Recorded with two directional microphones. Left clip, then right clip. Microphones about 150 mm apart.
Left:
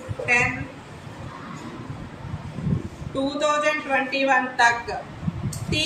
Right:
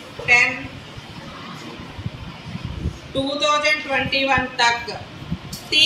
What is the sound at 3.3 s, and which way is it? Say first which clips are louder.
A woman's voice: right 3 dB; 25° left (ahead or behind).